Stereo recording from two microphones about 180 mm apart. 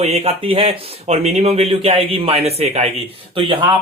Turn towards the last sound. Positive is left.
turn(degrees=-30)  # may be behind; listen again after turning